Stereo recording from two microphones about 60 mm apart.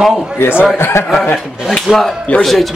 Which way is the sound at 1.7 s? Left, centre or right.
Centre.